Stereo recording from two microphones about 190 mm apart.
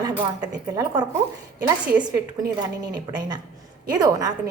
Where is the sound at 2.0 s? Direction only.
20° right (ahead or behind).